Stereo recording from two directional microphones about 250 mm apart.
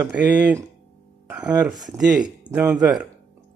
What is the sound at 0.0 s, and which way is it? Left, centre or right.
Speech, centre.